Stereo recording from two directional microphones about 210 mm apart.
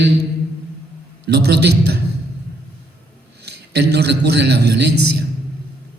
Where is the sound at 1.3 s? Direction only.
50° right (ahead or behind).